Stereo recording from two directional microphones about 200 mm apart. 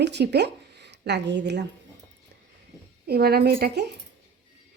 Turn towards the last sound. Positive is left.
turn(degrees=-50)  # may be behind; listen again after turning